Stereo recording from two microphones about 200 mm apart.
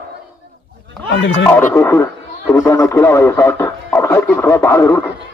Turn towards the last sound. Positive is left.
turn(degrees=15)  # may be behind; listen again after turning